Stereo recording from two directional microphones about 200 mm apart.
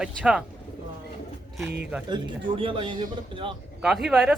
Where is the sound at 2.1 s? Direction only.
25° right (ahead or behind).